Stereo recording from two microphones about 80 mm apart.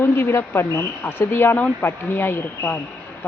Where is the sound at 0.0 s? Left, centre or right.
Left.